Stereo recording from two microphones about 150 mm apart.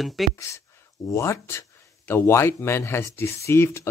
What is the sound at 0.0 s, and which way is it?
Speech, centre (ahead or behind).